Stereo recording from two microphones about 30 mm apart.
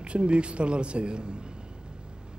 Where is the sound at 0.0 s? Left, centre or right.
Right.